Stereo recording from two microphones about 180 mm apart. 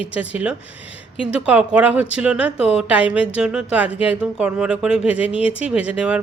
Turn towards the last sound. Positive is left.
turn(degrees=-5)  # may be behind; listen again after turning